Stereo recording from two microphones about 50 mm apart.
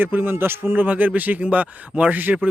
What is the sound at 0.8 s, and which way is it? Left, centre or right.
Speech, right.